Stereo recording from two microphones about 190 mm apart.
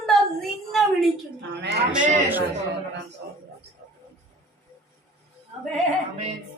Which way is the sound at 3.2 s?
55° right (ahead or behind).